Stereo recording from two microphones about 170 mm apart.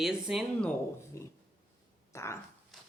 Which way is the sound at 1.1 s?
15° left (ahead or behind).